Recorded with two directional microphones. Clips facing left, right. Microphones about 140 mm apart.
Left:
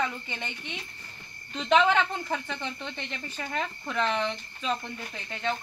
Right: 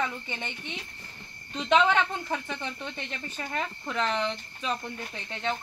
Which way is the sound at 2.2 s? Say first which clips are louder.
Even; 5° right (ahead or behind).